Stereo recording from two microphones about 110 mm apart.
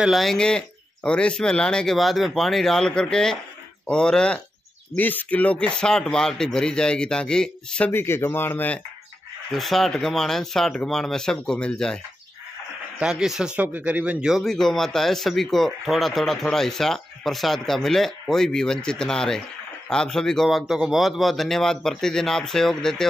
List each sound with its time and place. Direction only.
0.0 s speech: centre (ahead or behind)
7.9 s speech: 20° left (ahead or behind)
9.5 s speech: centre (ahead or behind)
13.0 s speech: 5° right (ahead or behind)